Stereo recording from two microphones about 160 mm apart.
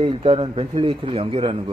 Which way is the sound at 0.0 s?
35° right (ahead or behind).